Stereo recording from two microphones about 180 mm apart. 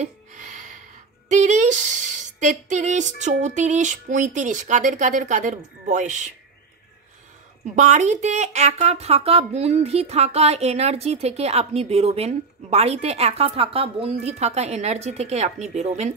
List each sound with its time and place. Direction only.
0.0 s a sound: 40° right (ahead or behind)
1.3 s speech: 40° right (ahead or behind)
7.6 s a woman's voice: 40° right (ahead or behind)